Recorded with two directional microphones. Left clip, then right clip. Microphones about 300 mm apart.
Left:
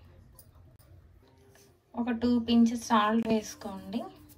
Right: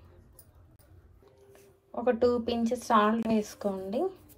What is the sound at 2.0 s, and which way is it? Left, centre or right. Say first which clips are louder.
Speech: right 5 dB; centre.